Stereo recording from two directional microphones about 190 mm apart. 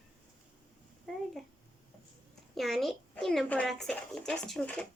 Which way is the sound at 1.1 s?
Centre (ahead or behind).